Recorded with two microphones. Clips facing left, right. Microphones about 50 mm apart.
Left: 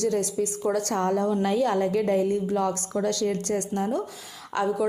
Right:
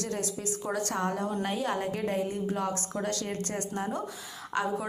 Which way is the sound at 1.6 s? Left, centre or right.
Left.